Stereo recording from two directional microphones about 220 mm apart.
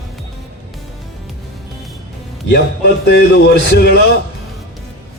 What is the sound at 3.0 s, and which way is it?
Speech, 50° left (ahead or behind).